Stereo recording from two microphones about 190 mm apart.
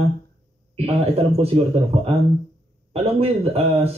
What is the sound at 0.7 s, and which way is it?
Speech, 30° right (ahead or behind).